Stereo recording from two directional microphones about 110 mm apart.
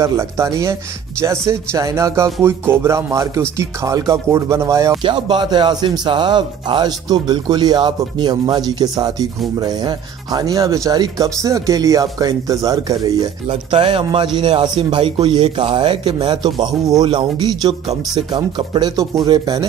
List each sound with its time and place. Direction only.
0.0 s speech: 25° right (ahead or behind)
5.0 s speech: 40° right (ahead or behind)
13.7 s speech: 50° right (ahead or behind)